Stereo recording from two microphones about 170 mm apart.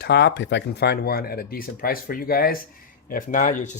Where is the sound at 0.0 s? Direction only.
85° left.